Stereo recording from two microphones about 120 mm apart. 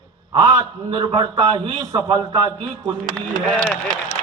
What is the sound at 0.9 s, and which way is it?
Speech, 35° right (ahead or behind).